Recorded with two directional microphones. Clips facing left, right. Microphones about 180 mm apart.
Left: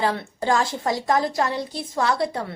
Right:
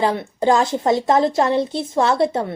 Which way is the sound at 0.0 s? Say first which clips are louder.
Right 5 dB; 20° right (ahead or behind).